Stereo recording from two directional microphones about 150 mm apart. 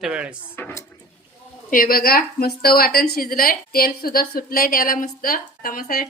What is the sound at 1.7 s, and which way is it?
A woman's voice, 70° left (ahead or behind).